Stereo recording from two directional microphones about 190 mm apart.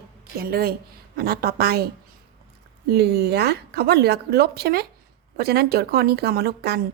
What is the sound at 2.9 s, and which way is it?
A woman's voice, 55° right (ahead or behind).